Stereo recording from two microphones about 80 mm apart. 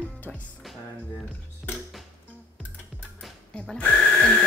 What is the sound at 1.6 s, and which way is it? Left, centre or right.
Music, centre.